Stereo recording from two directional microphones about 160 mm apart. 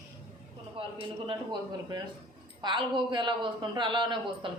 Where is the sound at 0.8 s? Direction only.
35° right (ahead or behind).